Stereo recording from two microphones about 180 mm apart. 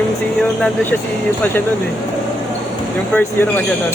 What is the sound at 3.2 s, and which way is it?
Speech, 10° left (ahead or behind).